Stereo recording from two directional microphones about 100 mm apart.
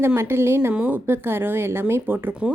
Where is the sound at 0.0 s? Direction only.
25° right (ahead or behind).